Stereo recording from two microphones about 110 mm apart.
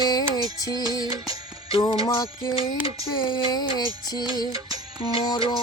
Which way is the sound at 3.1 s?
45° left (ahead or behind).